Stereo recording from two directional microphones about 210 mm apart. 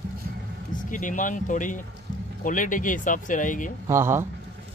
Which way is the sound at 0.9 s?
40° left (ahead or behind).